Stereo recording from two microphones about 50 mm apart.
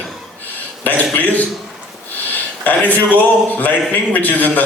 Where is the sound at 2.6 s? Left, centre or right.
Left.